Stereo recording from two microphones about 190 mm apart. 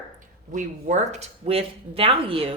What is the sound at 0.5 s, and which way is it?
A woman's voice, 40° right (ahead or behind).